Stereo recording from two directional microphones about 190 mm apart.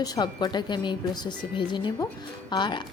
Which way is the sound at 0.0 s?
20° left (ahead or behind).